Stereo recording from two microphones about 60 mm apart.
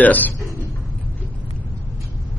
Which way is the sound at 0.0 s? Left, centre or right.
Left.